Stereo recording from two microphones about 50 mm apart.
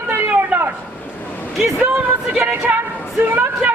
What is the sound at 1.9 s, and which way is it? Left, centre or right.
Music, right.